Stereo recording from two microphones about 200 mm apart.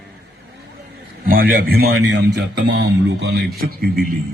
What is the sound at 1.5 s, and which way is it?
A man's voice, 50° right (ahead or behind).